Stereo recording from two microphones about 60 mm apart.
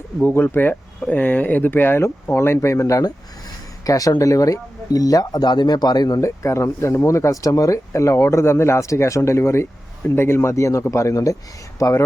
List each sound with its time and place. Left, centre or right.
0.2 s speech: left
3.8 s speech: left
6.1 s speech: left
10.9 s speech: left